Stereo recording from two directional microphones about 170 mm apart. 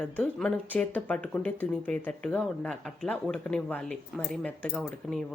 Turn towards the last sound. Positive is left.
turn(degrees=0)  # may be behind; listen again after turning